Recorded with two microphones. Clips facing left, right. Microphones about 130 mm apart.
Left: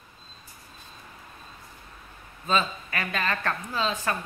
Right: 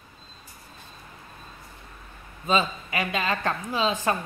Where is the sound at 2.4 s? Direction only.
15° right (ahead or behind).